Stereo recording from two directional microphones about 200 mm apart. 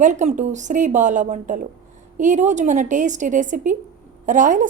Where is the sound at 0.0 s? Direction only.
40° right (ahead or behind).